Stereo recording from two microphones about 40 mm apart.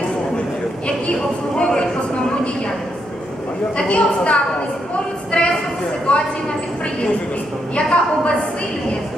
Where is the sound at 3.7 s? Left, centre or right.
Left.